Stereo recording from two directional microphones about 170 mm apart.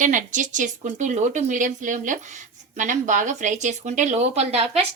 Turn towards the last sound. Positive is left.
turn(degrees=-35)  # may be behind; listen again after turning